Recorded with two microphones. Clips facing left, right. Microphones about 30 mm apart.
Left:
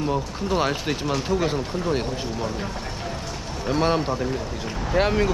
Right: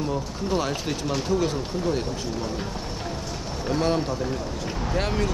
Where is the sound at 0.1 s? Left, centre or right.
Left.